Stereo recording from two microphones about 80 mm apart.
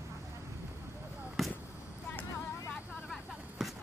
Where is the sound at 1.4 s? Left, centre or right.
Centre.